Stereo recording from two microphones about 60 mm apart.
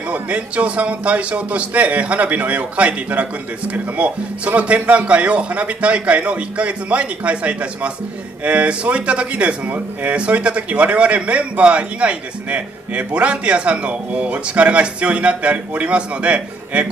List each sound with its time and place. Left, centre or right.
0.1 s speech: right